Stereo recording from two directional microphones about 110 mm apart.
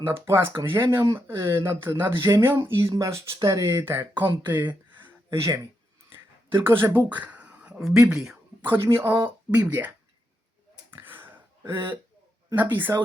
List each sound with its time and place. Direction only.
0.3 s speech: 20° right (ahead or behind)
5.3 s speech: 25° right (ahead or behind)
6.1 s a sound: 20° right (ahead or behind)
7.8 s speech: 5° right (ahead or behind)
8.6 s speech: 20° right (ahead or behind)
10.9 s a sound: 20° right (ahead or behind)
11.7 s speech: 20° right (ahead or behind)